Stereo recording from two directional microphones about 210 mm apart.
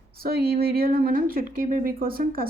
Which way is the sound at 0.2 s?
45° right (ahead or behind).